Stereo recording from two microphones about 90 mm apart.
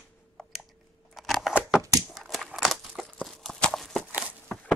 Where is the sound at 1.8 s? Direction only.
40° right (ahead or behind).